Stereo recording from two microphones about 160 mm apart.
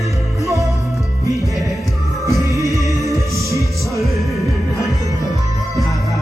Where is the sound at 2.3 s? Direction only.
20° right (ahead or behind).